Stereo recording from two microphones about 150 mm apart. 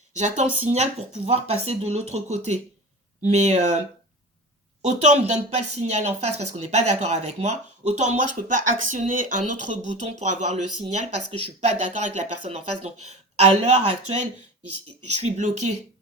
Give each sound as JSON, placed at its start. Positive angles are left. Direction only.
{"t": 0.2, "sound": "speech", "side_deg": -55}
{"t": 4.8, "sound": "speech", "side_deg": -50}